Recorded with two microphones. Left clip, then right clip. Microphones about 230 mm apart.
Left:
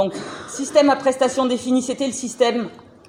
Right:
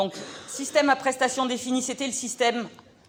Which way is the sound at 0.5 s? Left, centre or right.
Right.